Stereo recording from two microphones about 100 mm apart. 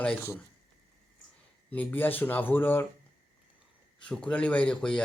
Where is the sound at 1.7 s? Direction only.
15° left (ahead or behind).